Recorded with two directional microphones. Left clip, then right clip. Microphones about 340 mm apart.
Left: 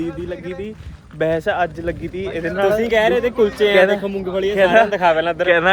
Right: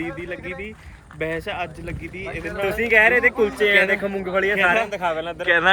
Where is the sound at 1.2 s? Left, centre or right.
Centre.